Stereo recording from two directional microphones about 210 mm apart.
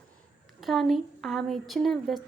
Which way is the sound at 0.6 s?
Centre (ahead or behind).